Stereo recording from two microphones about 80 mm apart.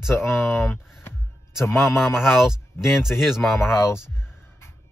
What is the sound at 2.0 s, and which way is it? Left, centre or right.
Speech, centre.